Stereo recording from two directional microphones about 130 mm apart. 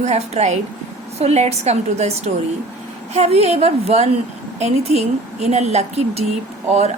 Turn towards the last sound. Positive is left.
turn(degrees=-60)  # may be behind; listen again after turning